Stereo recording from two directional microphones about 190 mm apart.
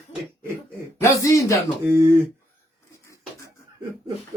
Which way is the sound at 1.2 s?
15° left (ahead or behind).